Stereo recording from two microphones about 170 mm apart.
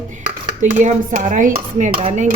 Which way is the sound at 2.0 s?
40° right (ahead or behind).